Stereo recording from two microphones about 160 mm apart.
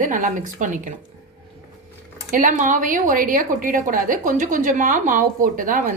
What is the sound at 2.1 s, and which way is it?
Speech, 55° right (ahead or behind).